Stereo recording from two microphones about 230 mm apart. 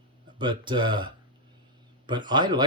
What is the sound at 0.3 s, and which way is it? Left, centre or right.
Speech, right.